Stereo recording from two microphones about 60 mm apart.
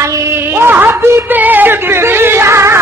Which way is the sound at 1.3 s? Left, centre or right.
Right.